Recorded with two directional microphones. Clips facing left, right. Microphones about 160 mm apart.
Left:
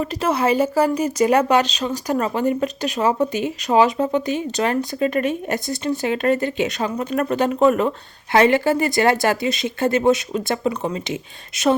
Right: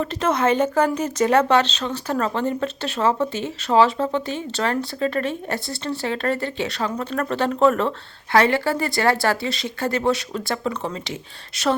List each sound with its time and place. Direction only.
0.0 s speech: 10° left (ahead or behind)